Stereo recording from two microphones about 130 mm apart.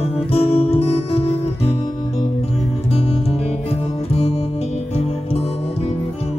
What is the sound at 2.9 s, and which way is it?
Music, 45° left (ahead or behind).